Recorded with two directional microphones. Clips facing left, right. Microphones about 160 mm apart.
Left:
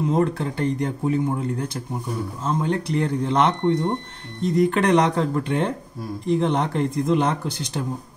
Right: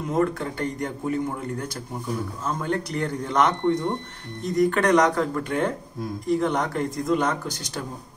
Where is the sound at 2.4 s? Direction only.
25° left (ahead or behind).